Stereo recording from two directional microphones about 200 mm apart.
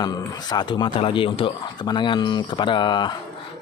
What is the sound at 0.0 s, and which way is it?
Speech, 20° left (ahead or behind).